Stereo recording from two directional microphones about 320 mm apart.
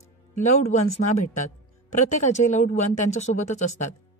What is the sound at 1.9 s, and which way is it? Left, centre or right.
Speech, left.